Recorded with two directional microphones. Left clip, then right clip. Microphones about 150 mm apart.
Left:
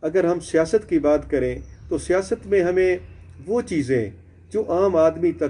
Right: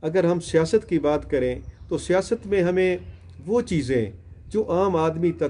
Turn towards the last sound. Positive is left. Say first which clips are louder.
# left 4 dB
turn(degrees=-35)  # may be behind; listen again after turning